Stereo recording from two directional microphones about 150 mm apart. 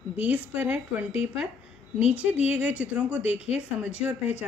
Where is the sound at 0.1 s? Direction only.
10° right (ahead or behind).